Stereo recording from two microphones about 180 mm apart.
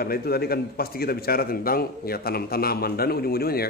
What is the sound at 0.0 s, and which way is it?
A man's voice, 55° left (ahead or behind).